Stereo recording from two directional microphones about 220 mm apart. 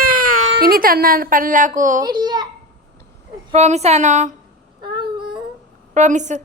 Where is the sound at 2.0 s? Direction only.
20° right (ahead or behind).